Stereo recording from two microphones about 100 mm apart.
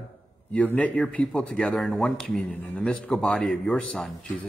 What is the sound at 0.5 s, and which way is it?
Speech, 15° left (ahead or behind).